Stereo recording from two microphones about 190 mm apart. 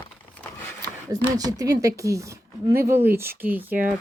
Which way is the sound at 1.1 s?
20° right (ahead or behind).